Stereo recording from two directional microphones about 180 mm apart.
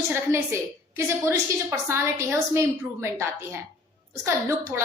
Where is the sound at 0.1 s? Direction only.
15° right (ahead or behind).